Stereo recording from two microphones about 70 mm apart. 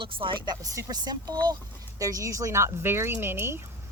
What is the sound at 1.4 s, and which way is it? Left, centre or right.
Speech, right.